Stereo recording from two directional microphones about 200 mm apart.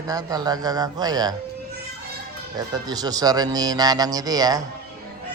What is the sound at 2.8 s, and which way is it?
Speech, 20° right (ahead or behind).